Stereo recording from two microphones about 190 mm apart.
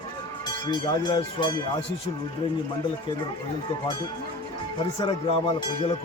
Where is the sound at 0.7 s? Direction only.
20° left (ahead or behind).